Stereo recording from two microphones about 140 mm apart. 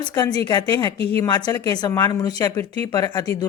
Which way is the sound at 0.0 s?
30° left (ahead or behind).